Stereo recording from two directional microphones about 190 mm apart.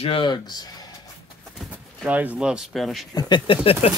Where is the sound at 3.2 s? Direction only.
25° left (ahead or behind).